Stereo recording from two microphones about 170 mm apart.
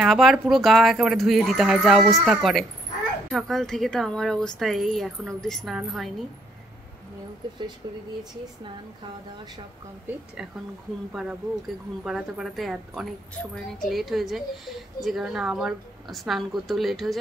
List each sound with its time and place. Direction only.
0.0 s speech: centre (ahead or behind)
7.8 s speech: 25° right (ahead or behind)
12.0 s speech: 5° right (ahead or behind)